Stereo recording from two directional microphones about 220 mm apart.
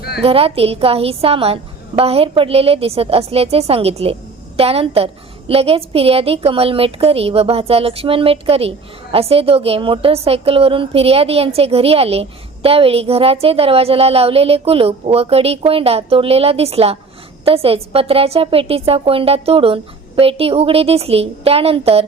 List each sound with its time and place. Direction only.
0.2 s a woman's voice: 25° right (ahead or behind)